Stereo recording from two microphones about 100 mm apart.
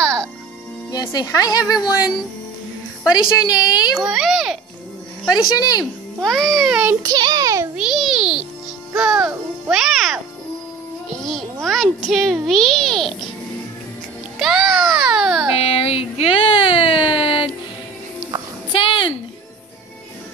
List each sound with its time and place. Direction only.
0.0 s music: 10° left (ahead or behind)
0.9 s a woman's voice: 35° left (ahead or behind)
3.9 s a child's voice: centre (ahead or behind)
5.5 s speech: 40° left (ahead or behind)
6.2 s a child's voice: 5° left (ahead or behind)
7.0 s a child's voice: 45° right (ahead or behind)
7.7 s a sound: 5° right (ahead or behind)
9.0 s music: 5° right (ahead or behind)
11.1 s a sound: 5° left (ahead or behind)
12.1 s a child's voice: centre (ahead or behind)
14.4 s baby cry: 5° right (ahead or behind)
15.6 s baby cry: 70° left (ahead or behind)
18.7 s a sound: 60° left (ahead or behind)